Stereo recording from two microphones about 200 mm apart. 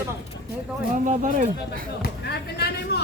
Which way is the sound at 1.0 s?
40° right (ahead or behind).